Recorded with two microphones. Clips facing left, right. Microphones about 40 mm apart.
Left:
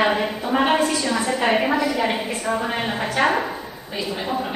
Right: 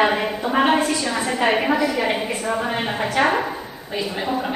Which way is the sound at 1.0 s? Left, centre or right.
Right.